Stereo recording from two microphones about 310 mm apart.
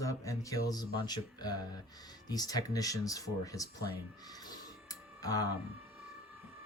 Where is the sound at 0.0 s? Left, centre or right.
Centre.